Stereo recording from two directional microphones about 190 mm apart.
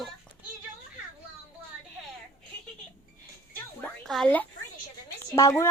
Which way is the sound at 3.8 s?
Centre (ahead or behind).